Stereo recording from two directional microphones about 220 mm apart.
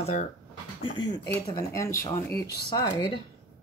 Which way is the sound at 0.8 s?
20° left (ahead or behind).